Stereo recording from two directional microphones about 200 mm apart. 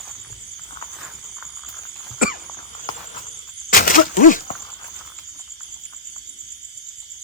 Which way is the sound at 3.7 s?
45° left (ahead or behind).